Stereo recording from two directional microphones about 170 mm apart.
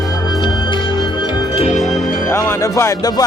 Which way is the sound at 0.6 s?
30° left (ahead or behind).